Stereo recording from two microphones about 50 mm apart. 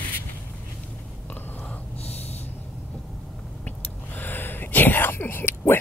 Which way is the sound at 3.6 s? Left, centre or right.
Left.